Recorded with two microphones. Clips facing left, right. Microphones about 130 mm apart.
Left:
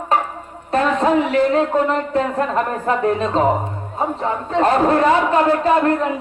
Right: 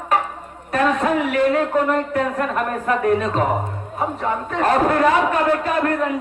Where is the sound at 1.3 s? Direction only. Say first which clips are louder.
Left 2 dB; 25° left (ahead or behind).